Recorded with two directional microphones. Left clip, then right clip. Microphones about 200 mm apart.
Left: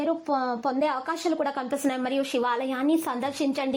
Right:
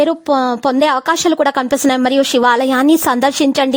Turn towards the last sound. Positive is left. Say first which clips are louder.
# right 14 dB
turn(degrees=-50)  # may be behind; listen again after turning